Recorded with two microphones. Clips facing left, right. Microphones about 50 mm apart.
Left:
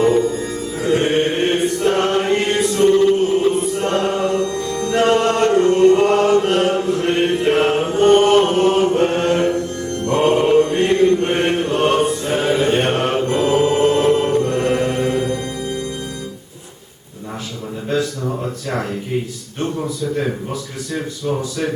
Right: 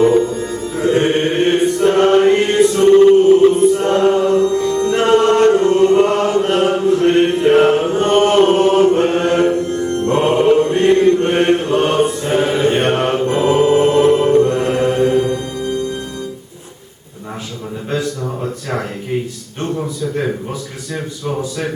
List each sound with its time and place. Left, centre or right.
0.0 s music: right
2.6 s chant: right
5.0 s music: right
5.5 s chant: right
6.2 s mantra: centre
7.3 s chant: centre
9.3 s music: right
10.2 s mantra: right
10.9 s chant: right
12.4 s music: centre
13.2 s music: centre
14.6 s mantra: right
15.1 s music: centre